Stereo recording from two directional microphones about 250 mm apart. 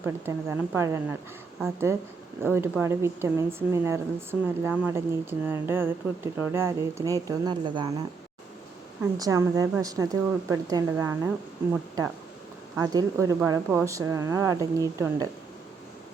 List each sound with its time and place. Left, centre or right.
0.0 s a woman's voice: centre
9.1 s a woman's voice: centre